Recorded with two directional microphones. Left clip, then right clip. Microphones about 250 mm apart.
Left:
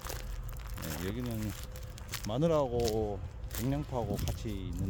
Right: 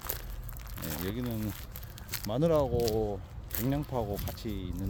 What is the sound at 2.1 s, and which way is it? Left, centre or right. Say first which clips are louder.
Speech: right 2 dB; centre.